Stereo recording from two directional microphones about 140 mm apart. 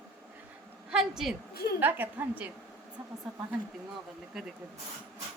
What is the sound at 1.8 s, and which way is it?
Speech, 15° right (ahead or behind).